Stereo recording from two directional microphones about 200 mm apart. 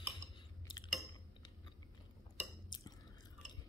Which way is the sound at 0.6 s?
25° left (ahead or behind).